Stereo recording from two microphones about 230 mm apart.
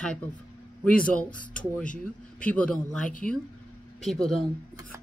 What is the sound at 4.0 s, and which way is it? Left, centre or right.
Speech, centre.